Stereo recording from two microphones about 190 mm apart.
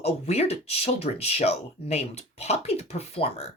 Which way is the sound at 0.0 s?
35° left (ahead or behind).